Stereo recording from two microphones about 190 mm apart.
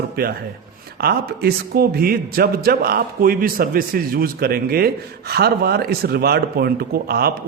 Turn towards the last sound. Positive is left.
turn(degrees=-55)  # may be behind; listen again after turning